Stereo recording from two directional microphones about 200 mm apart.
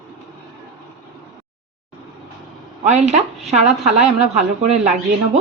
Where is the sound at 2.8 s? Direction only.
35° right (ahead or behind).